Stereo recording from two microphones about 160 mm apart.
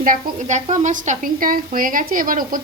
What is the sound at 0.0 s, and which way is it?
A woman's voice, 50° right (ahead or behind).